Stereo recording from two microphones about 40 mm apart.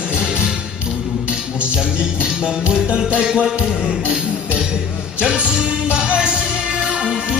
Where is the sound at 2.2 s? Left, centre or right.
Right.